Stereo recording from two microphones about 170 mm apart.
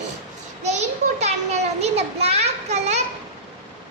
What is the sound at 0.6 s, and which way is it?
Children playing, 40° right (ahead or behind).